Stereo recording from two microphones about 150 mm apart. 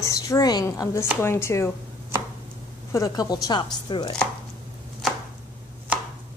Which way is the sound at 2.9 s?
25° left (ahead or behind).